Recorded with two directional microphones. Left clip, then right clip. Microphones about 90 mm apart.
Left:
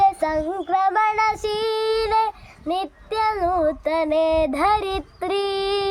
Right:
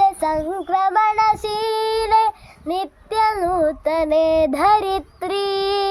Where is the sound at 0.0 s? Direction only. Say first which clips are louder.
Right 1 dB; 30° right (ahead or behind).